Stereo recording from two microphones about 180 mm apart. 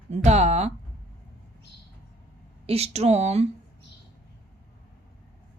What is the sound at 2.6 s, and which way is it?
Speech, 35° right (ahead or behind).